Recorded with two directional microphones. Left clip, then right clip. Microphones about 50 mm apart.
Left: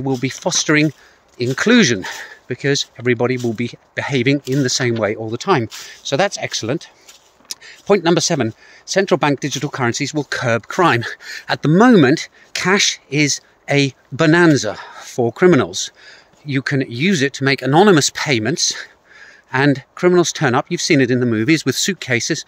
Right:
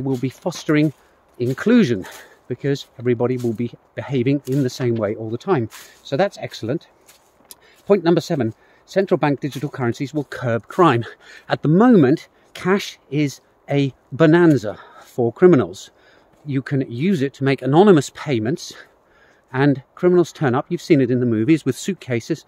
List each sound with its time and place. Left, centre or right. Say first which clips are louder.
0.2 s speech: left 7 dB; right
2.1 s a sound: left 9 dB; centre
2.5 s speech: left 5 dB; right
7.4 s a sound: left 14 dB; right
7.9 s speech: left 2 dB; centre
20.0 s speech: left 2 dB; right